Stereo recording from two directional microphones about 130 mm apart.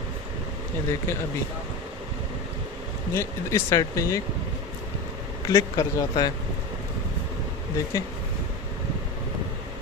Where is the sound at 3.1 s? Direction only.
20° left (ahead or behind).